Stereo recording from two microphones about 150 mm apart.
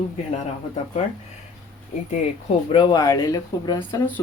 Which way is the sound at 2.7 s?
30° left (ahead or behind).